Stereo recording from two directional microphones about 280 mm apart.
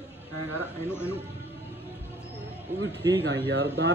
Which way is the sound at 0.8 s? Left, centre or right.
Centre.